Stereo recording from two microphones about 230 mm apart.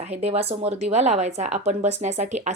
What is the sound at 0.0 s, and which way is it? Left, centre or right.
Speech, right.